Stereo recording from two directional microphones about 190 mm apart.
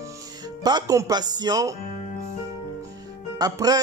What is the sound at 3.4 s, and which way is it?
Speech, 20° right (ahead or behind).